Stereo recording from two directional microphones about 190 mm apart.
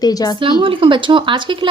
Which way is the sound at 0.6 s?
30° right (ahead or behind).